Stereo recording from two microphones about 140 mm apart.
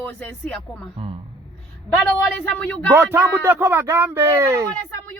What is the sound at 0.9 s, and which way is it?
Speech, 45° right (ahead or behind).